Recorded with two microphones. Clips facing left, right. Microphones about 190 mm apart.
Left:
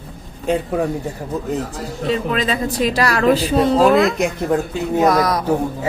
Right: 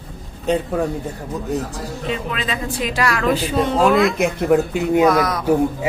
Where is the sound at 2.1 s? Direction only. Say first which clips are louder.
Left 6 dB; 40° left (ahead or behind).